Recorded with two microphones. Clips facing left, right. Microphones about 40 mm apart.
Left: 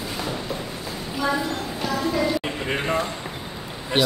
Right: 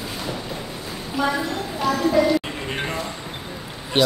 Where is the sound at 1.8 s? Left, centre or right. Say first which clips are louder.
Right 5 dB; centre.